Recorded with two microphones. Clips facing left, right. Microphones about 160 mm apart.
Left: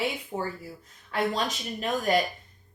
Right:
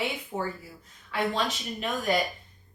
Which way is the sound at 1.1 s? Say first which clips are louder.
Left 1 dB; 40° left (ahead or behind).